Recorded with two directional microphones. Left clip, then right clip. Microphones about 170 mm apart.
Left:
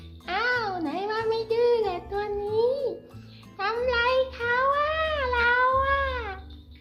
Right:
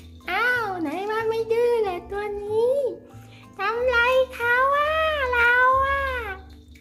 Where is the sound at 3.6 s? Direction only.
15° right (ahead or behind).